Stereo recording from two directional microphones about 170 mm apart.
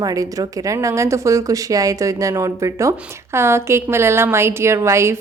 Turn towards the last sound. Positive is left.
turn(degrees=-15)  # may be behind; listen again after turning